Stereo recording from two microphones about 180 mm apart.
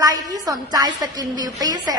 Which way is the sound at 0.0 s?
20° right (ahead or behind).